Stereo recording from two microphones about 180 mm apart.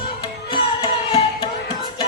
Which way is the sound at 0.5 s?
30° left (ahead or behind).